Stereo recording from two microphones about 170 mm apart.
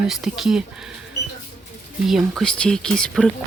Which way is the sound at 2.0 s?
Centre (ahead or behind).